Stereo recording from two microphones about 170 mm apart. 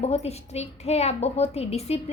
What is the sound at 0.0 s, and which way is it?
A woman's voice, 40° left (ahead or behind).